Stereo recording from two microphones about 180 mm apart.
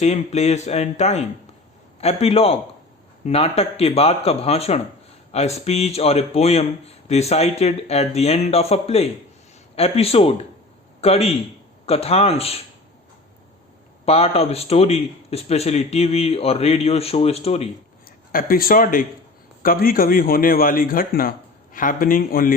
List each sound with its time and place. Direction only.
0.0 s speech: 35° left (ahead or behind)
14.0 s speech: 35° left (ahead or behind)
18.3 s a man's voice: 55° left (ahead or behind)